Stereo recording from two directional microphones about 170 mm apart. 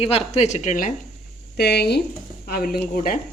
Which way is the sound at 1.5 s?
70° left (ahead or behind).